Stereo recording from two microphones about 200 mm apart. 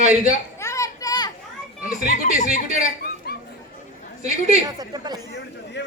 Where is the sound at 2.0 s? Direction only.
40° left (ahead or behind).